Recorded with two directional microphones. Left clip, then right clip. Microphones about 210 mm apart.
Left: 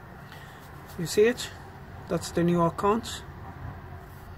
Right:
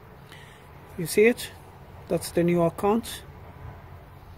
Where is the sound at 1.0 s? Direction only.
30° right (ahead or behind).